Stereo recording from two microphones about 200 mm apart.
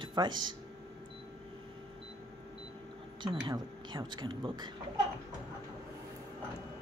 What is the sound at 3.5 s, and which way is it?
Speech, 20° right (ahead or behind).